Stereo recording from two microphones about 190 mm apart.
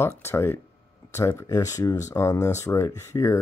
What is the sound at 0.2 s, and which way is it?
Speech, 15° left (ahead or behind).